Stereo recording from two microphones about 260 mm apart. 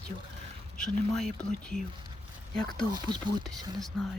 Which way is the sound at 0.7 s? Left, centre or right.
Centre.